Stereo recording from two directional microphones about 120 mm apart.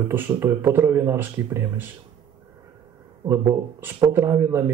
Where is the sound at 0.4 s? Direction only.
20° right (ahead or behind).